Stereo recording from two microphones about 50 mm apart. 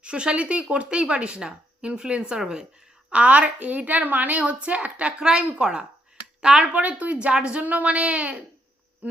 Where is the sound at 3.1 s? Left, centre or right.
Right.